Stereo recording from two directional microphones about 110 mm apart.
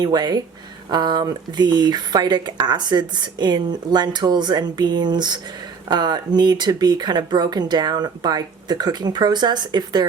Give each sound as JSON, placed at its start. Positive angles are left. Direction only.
{"t": 0.0, "sound": "speech", "side_deg": -40}